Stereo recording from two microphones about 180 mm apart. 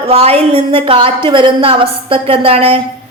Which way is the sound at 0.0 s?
35° right (ahead or behind).